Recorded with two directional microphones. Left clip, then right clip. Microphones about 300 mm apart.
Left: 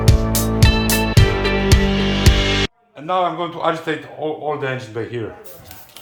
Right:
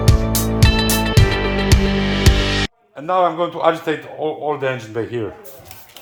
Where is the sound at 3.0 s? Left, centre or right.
Right.